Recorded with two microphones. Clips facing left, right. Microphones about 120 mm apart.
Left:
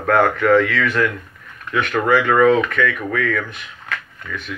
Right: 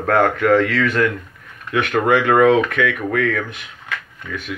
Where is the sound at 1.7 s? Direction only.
55° right (ahead or behind).